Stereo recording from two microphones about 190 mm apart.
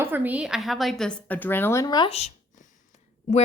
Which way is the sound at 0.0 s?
10° right (ahead or behind).